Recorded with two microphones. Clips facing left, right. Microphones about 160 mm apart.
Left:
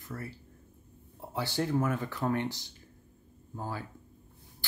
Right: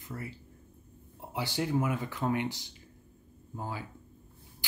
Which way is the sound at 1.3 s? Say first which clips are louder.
Even; 15° right (ahead or behind).